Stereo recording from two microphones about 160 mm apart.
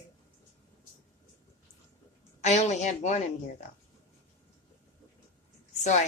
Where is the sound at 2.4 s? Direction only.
45° left (ahead or behind).